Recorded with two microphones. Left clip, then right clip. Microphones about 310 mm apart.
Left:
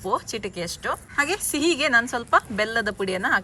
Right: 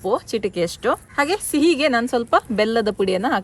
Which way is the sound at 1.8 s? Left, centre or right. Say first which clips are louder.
Right 2 dB; right.